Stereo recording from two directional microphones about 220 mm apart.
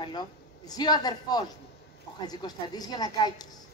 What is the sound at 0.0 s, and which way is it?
A woman's voice, 20° left (ahead or behind).